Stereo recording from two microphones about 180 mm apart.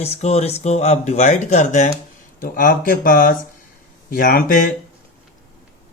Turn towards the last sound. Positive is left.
turn(degrees=55)  # may be behind; listen again after turning